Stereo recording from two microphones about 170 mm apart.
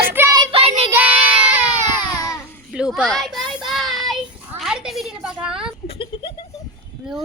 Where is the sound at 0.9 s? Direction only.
10° right (ahead or behind).